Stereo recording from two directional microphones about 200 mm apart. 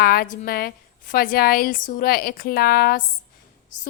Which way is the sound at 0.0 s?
50° left (ahead or behind).